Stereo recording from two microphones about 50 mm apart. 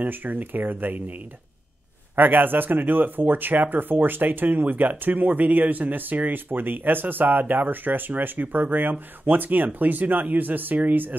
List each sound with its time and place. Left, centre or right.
0.0 s speech: right
2.1 s speech: right